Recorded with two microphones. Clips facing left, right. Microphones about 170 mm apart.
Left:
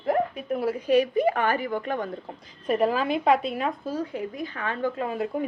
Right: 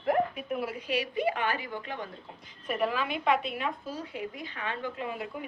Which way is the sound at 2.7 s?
40° left (ahead or behind).